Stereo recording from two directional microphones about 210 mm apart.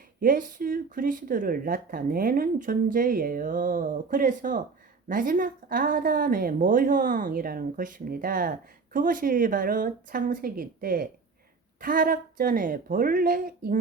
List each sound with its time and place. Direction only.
0.2 s a woman's voice: 40° right (ahead or behind)